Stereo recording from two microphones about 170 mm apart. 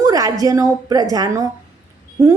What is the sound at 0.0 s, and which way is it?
A woman's voice, 20° right (ahead or behind).